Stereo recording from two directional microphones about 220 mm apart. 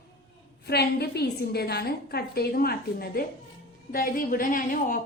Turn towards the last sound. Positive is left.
turn(degrees=40)  # may be behind; listen again after turning